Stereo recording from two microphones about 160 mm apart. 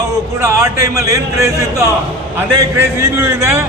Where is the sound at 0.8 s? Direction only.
20° right (ahead or behind).